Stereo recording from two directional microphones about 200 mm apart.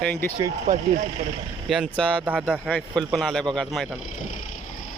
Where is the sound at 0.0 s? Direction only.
5° left (ahead or behind).